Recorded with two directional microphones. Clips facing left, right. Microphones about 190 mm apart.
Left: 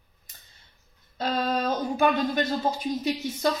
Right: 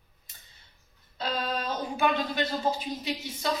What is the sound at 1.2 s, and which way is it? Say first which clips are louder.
Speech: left 5 dB; 45° left (ahead or behind).